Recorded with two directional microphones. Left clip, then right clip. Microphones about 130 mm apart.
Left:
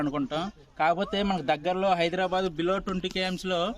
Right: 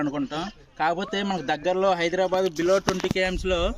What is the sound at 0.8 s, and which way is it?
Speech, 60° left (ahead or behind).